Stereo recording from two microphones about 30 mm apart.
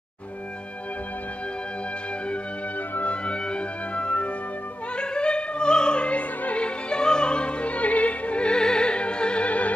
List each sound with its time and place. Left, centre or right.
3.0 s music: left
4.9 s opera: left
6.0 s opera: left
6.9 s music: left
8.5 s opera: left
9.5 s music: left